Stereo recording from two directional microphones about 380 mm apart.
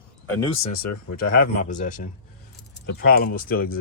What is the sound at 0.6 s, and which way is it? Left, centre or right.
Speech, left.